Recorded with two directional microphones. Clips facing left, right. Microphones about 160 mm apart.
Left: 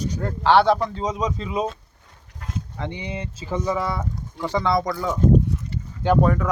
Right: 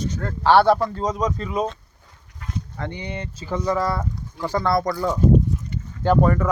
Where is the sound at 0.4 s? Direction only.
5° right (ahead or behind).